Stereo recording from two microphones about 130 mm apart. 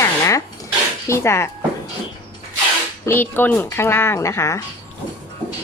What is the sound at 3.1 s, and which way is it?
Speech, 15° left (ahead or behind).